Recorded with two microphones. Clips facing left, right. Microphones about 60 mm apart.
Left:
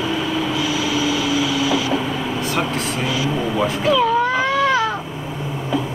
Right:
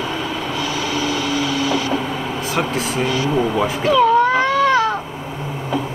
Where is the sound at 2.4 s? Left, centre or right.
Centre.